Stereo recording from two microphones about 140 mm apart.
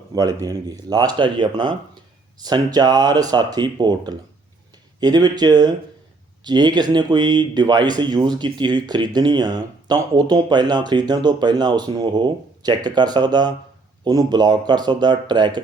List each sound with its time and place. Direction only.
0.1 s speech: 25° right (ahead or behind)